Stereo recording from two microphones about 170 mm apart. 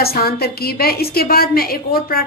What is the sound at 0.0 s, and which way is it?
A woman's voice, 65° left (ahead or behind).